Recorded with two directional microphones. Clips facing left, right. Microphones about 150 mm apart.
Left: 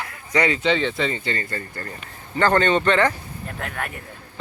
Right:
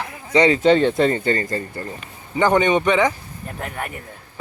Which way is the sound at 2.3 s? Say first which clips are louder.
Right 2 dB; 15° right (ahead or behind).